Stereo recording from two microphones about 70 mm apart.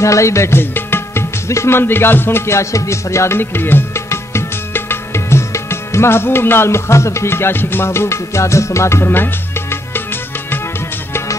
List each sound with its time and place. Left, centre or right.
0.0 s speech: left